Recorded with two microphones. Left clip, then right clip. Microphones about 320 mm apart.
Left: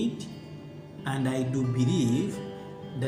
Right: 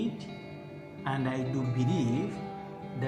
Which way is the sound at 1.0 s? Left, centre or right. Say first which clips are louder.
Left 2 dB; right.